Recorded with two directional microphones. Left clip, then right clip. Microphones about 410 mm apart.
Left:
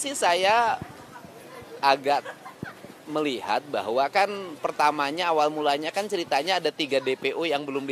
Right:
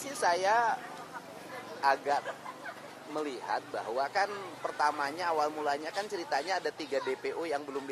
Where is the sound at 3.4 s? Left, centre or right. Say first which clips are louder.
Left 8 dB; left.